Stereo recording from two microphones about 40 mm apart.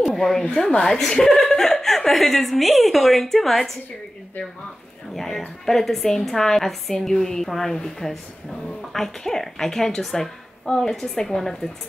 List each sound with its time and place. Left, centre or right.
0.0 s a woman's voice: centre
0.4 s speech: centre
5.1 s a woman's voice: centre